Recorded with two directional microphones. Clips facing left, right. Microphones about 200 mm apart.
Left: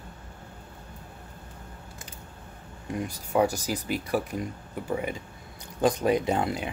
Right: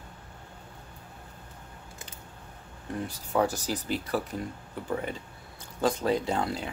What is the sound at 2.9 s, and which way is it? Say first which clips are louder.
Speech: left 2 dB; 10° left (ahead or behind).